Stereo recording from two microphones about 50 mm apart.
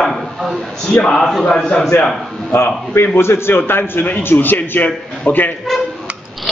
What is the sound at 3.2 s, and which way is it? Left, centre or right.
A man's voice, left.